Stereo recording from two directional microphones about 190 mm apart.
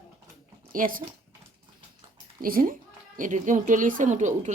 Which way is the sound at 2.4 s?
50° right (ahead or behind).